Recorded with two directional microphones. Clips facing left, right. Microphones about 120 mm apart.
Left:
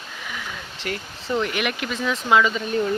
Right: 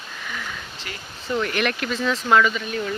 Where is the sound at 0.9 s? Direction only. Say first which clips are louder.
Left 10 dB; 50° left (ahead or behind).